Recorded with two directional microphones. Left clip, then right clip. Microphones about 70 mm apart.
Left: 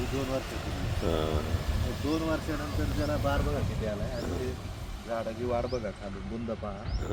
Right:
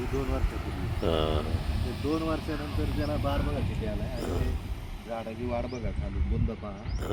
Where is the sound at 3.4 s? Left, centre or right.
Left.